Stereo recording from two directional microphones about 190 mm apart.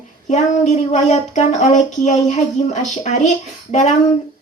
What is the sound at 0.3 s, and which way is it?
A child's voice, 40° left (ahead or behind).